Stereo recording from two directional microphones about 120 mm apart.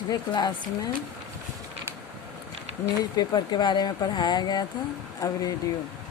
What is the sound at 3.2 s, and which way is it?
Speech, 35° left (ahead or behind).